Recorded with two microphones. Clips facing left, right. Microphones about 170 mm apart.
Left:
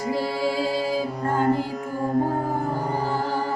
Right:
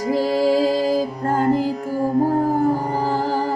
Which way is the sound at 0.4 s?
40° right (ahead or behind).